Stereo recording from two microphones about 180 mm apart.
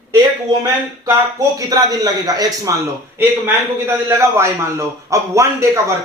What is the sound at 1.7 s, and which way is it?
A man's voice, 20° right (ahead or behind).